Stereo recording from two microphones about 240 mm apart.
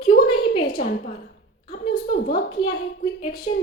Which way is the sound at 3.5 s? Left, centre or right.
Left.